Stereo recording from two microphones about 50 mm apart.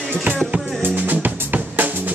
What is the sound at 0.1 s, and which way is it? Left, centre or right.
Music, right.